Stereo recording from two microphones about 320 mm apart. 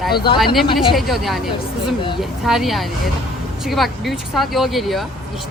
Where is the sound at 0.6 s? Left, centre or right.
Centre.